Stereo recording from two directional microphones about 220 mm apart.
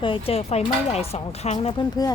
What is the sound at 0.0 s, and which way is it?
Speech, 25° left (ahead or behind).